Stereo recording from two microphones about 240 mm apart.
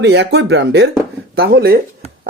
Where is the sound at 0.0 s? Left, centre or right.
Right.